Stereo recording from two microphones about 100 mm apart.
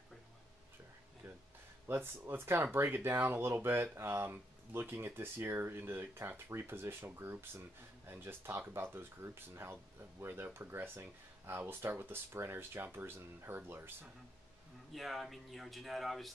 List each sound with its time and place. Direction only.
1.9 s speech: 20° right (ahead or behind)
14.9 s speech: centre (ahead or behind)